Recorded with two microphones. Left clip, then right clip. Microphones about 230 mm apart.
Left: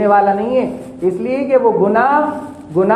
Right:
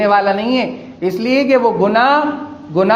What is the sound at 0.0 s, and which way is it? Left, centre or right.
Speech, right.